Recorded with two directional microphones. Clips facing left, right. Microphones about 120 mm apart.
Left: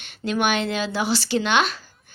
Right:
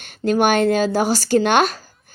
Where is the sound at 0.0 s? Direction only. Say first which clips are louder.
Right 6 dB; 45° right (ahead or behind).